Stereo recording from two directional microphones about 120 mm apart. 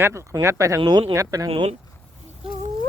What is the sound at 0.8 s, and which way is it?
Speech, 40° right (ahead or behind).